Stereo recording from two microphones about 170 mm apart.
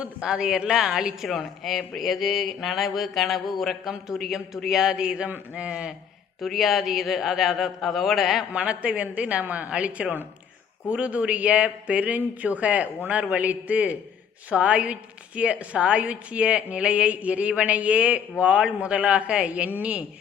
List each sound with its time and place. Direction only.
0.0 s a woman's voice: 5° right (ahead or behind)